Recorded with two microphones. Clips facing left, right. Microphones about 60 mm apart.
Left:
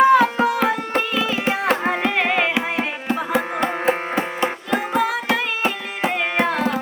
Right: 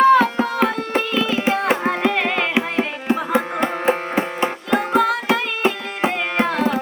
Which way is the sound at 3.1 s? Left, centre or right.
Centre.